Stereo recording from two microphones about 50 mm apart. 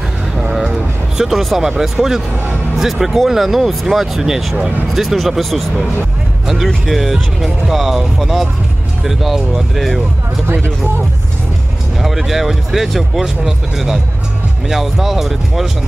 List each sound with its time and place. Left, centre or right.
0.4 s a sound: centre
1.7 s speech: centre
10.4 s speech: right
12.0 s speech: centre